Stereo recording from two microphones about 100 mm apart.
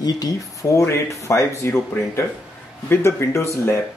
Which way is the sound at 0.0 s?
35° left (ahead or behind).